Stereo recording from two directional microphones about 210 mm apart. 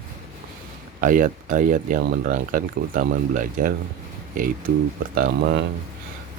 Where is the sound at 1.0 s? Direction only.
40° right (ahead or behind).